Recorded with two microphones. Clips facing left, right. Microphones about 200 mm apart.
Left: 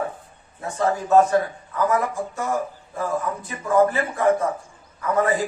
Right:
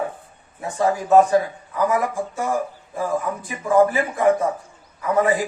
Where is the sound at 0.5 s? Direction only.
15° right (ahead or behind).